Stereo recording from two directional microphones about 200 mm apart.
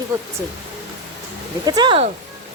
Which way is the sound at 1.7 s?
20° right (ahead or behind).